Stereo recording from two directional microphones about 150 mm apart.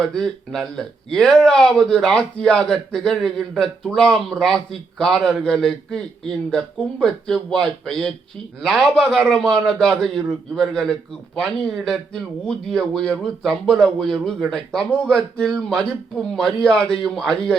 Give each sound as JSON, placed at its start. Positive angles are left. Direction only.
{"t": 0.0, "sound": "a man's voice", "side_deg": 5}